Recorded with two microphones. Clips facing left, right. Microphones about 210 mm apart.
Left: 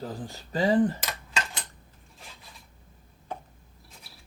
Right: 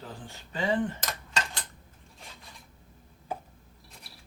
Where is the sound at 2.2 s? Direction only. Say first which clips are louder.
Even; centre (ahead or behind).